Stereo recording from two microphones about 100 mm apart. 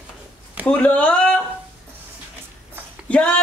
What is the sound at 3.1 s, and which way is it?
Speech, 15° left (ahead or behind).